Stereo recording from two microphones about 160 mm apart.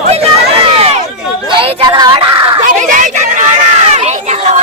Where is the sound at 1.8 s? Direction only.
25° right (ahead or behind).